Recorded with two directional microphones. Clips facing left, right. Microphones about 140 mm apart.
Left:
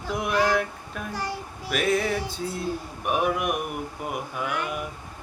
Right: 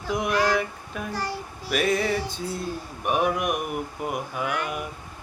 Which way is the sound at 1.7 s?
Centre (ahead or behind).